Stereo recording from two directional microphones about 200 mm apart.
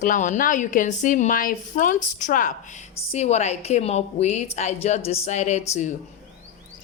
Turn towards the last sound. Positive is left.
turn(degrees=35)  # may be behind; listen again after turning